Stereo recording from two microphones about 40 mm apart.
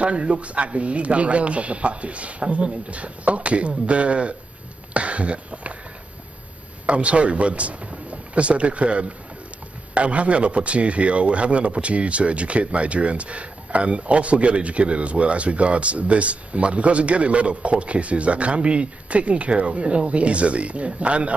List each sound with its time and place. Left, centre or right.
0.0 s speech: right
6.9 s speech: right